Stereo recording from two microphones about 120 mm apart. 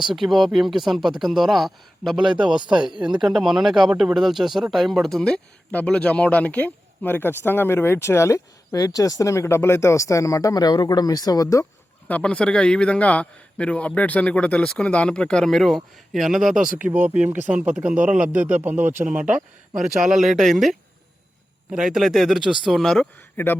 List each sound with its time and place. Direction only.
0.0 s a man's voice: centre (ahead or behind)
2.6 s speech: 40° right (ahead or behind)
3.2 s speech: centre (ahead or behind); by 11.6 s 30° left (ahead or behind)
12.0 s a man's voice: 10° left (ahead or behind)
23.4 s speech: 15° left (ahead or behind)